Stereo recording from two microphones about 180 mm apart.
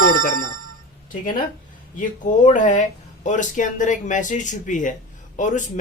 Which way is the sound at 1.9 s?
45° left (ahead or behind).